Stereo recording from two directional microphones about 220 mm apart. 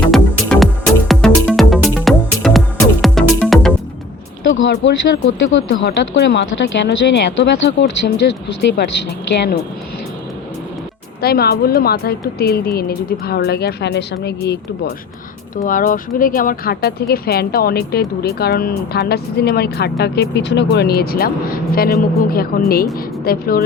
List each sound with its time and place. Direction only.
0.1 s music: centre (ahead or behind)
4.5 s speech: 55° left (ahead or behind)
11.2 s speech: 45° left (ahead or behind)
15.6 s speech: 40° left (ahead or behind)